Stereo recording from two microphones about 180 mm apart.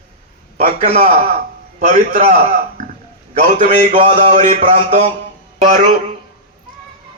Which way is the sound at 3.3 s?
40° right (ahead or behind).